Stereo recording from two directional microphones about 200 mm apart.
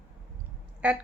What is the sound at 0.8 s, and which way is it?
Speech, 5° right (ahead or behind).